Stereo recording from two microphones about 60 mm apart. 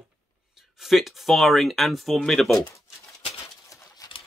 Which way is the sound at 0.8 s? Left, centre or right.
Centre.